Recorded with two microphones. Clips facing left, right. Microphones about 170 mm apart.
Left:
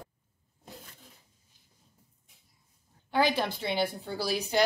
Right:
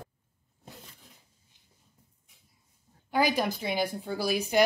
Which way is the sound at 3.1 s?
10° right (ahead or behind).